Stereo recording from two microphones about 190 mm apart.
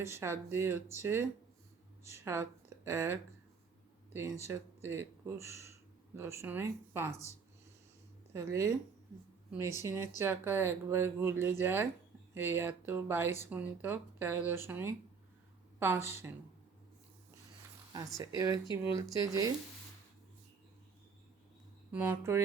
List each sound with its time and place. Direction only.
0.0 s speech: 15° right (ahead or behind)
4.4 s speech: 15° right (ahead or behind)
8.3 s speech: 15° right (ahead or behind)
18.3 s speech: 20° right (ahead or behind)
21.9 s speech: 10° right (ahead or behind)